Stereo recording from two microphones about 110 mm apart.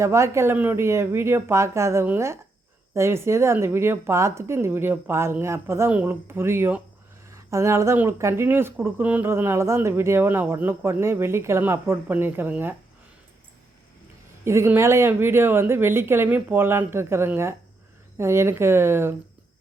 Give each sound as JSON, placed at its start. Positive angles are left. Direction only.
{"t": 0.0, "sound": "speech", "side_deg": -25}
{"t": 14.4, "sound": "speech", "side_deg": -25}